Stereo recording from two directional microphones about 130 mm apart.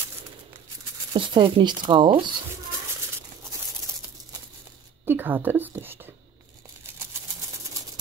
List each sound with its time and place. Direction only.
1.1 s speech: 40° right (ahead or behind)
5.0 s a woman's voice: 15° right (ahead or behind)